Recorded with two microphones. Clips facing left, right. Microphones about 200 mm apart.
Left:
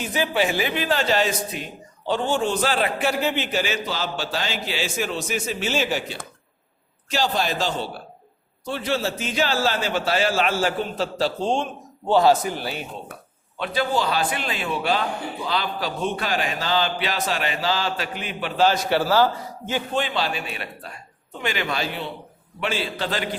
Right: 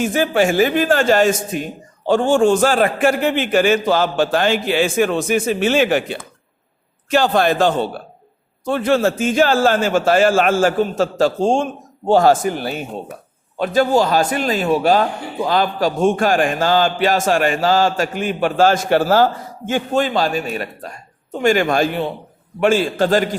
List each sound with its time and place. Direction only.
0.0 s a man's voice: 50° right (ahead or behind)